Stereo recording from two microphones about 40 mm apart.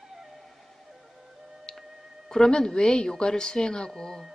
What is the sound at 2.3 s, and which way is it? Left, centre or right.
A woman's voice, centre.